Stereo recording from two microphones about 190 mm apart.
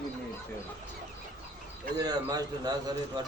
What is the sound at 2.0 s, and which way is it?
Speech, 20° right (ahead or behind).